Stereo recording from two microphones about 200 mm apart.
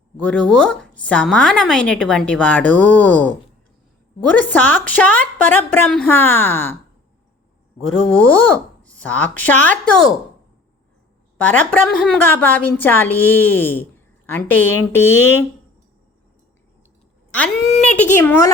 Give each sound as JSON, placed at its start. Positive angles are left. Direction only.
{"t": 0.2, "sound": "a woman's voice", "side_deg": 5}
{"t": 4.4, "sound": "a woman's voice", "side_deg": 10}
{"t": 8.0, "sound": "a woman's voice", "side_deg": 5}
{"t": 11.3, "sound": "a woman's voice", "side_deg": 5}
{"t": 17.3, "sound": "a woman's voice", "side_deg": 5}